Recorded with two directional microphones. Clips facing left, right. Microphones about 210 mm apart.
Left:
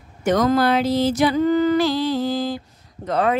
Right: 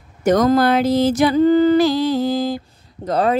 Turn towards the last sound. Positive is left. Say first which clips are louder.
# right 2 dB
turn(degrees=-35)  # may be behind; listen again after turning